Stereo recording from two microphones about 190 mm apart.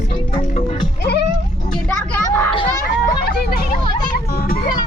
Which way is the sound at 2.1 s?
10° left (ahead or behind).